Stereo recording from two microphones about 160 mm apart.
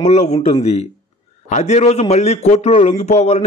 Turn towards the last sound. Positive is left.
turn(degrees=45)  # may be behind; listen again after turning